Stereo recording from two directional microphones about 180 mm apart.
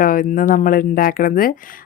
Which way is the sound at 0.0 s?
50° left (ahead or behind).